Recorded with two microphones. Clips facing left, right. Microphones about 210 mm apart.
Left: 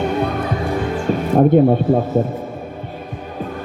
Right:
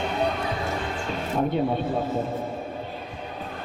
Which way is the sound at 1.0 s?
50° left (ahead or behind).